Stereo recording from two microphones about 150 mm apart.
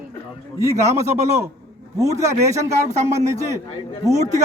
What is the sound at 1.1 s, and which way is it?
Speech, 50° right (ahead or behind).